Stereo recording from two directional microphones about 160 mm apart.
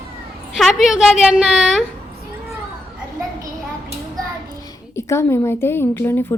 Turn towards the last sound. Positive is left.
turn(degrees=15)  # may be behind; listen again after turning